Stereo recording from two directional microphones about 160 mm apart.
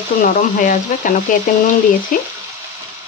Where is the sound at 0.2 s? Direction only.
55° left (ahead or behind).